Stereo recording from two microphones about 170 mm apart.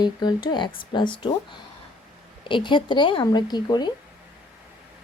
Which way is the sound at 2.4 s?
30° left (ahead or behind).